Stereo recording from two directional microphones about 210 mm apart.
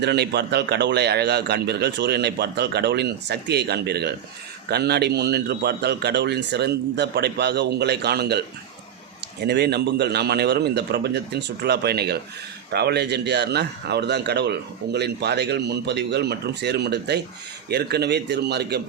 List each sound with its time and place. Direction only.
0.0 s a man's voice: 50° right (ahead or behind)